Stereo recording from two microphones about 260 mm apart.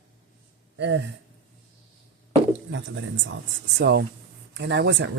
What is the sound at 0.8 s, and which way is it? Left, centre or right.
Speech, right.